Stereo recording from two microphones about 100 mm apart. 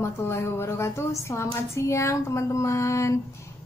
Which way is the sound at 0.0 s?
25° left (ahead or behind).